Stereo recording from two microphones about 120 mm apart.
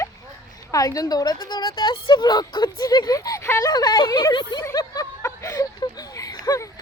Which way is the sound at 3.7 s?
35° left (ahead or behind).